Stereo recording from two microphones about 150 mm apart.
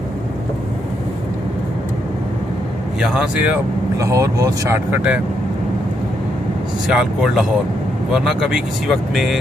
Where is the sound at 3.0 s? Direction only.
5° right (ahead or behind).